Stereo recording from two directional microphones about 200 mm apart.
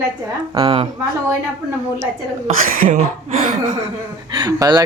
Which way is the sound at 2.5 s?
45° right (ahead or behind).